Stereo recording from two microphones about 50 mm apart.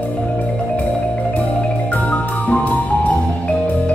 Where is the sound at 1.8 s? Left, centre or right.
Left.